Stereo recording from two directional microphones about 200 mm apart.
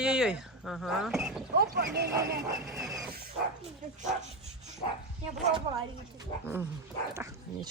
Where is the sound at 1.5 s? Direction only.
55° right (ahead or behind).